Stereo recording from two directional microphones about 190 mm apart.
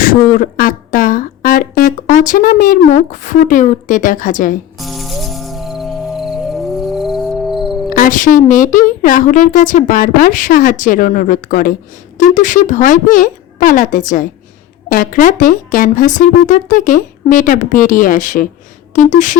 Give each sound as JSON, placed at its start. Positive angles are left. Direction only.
{"t": 0.0, "sound": "speech", "side_deg": 45}
{"t": 4.8, "sound": "music", "side_deg": 0}
{"t": 7.9, "sound": "speech", "side_deg": 45}
{"t": 18.9, "sound": "a sound", "side_deg": 40}